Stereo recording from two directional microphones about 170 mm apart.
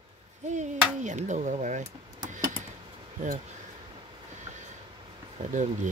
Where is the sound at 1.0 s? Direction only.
45° right (ahead or behind).